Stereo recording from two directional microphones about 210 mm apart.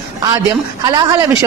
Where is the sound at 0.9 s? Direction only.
15° right (ahead or behind).